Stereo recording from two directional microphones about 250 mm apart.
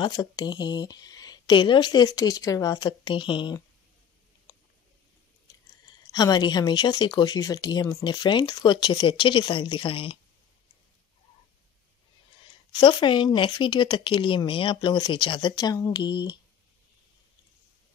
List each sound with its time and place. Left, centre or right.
0.0 s speech: centre
6.0 s speech: centre
12.7 s speech: centre